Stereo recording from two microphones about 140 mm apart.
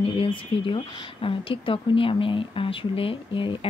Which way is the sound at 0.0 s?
40° left (ahead or behind).